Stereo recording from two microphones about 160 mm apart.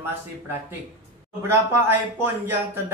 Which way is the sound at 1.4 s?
15° right (ahead or behind).